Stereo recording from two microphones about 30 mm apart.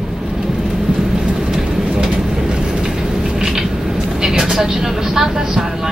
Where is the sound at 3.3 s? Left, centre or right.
Centre.